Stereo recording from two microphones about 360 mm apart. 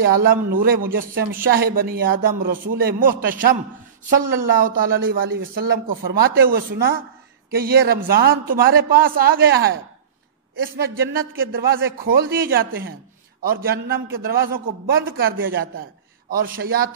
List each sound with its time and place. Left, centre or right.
0.5 s speech: right
10.8 s a man's voice: right